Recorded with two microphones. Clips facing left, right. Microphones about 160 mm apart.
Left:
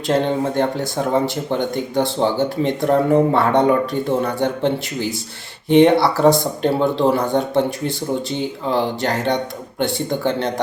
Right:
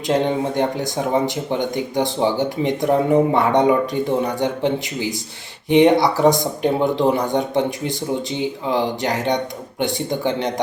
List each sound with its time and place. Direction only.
0.1 s speech: 15° right (ahead or behind)